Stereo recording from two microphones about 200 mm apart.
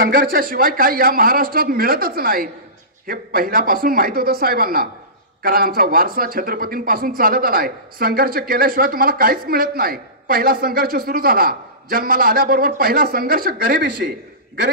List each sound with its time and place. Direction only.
0.0 s speech: 45° right (ahead or behind)